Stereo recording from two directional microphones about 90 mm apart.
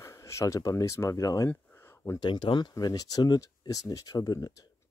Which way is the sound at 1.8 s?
30° left (ahead or behind).